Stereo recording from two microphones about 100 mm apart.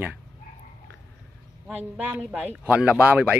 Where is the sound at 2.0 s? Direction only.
15° right (ahead or behind).